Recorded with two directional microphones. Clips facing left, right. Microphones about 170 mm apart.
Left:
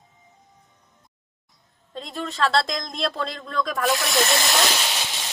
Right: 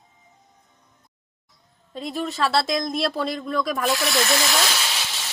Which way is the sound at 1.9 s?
5° right (ahead or behind).